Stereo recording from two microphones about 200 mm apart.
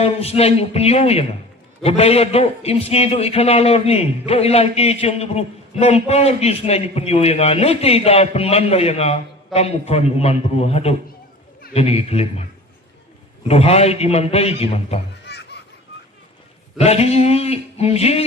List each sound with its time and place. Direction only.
0.0 s a man's voice: 30° left (ahead or behind)
13.5 s a man's voice: 30° left (ahead or behind)
15.3 s baby laughter: 55° left (ahead or behind)
16.7 s a man's voice: 30° left (ahead or behind)